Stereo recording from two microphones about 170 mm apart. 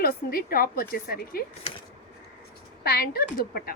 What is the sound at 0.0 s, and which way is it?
A woman's voice, 60° left (ahead or behind).